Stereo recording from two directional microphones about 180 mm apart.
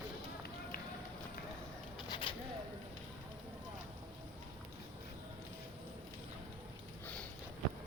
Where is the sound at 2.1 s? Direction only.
25° left (ahead or behind).